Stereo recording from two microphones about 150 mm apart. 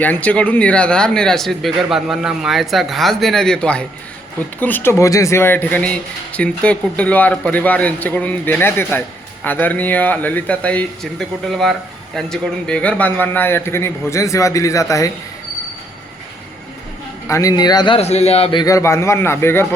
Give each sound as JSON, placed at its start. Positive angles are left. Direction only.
{"t": 0.0, "sound": "speech", "side_deg": 10}
{"t": 17.2, "sound": "a man's voice", "side_deg": 20}
{"t": 18.6, "sound": "speech", "side_deg": 20}